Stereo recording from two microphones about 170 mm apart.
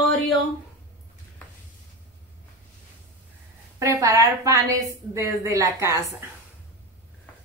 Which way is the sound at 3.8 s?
20° right (ahead or behind).